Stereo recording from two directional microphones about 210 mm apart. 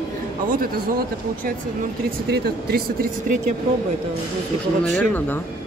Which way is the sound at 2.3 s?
45° right (ahead or behind).